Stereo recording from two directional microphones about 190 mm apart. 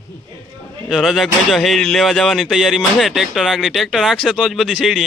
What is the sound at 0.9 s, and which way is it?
Speech, centre (ahead or behind).